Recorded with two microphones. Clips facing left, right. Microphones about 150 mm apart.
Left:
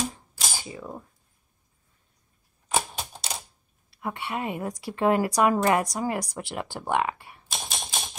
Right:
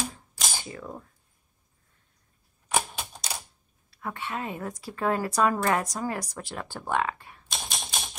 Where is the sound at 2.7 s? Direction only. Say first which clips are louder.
Left 1 dB; 25° left (ahead or behind).